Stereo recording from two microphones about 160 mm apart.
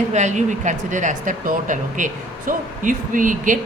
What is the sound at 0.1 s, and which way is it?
Speech, 45° right (ahead or behind).